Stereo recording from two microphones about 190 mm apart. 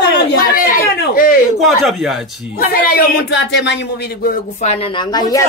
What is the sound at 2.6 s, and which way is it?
Speech, 50° left (ahead or behind).